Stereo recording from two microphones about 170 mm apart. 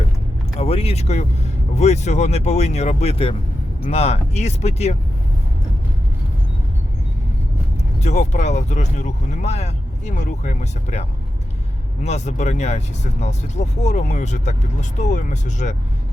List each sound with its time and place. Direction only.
0.6 s speech: 35° left (ahead or behind)
8.0 s speech: 40° left (ahead or behind)
12.0 s speech: 40° left (ahead or behind)